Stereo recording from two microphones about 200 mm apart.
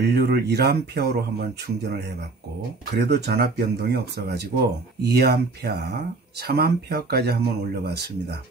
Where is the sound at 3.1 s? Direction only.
55° right (ahead or behind).